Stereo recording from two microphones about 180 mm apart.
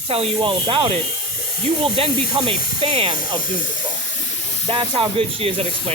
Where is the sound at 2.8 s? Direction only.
35° right (ahead or behind).